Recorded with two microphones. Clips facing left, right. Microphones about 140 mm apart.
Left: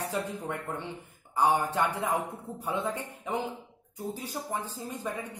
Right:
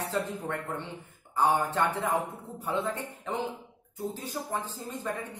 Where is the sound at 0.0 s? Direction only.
15° left (ahead or behind).